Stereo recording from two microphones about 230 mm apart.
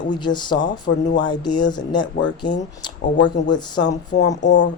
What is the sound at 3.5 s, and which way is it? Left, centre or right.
Speech, centre.